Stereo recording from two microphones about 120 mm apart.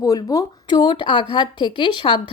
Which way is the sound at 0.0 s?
30° left (ahead or behind).